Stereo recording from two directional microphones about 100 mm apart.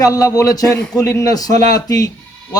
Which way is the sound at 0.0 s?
35° left (ahead or behind).